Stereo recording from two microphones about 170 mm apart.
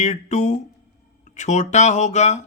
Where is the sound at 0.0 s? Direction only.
40° left (ahead or behind).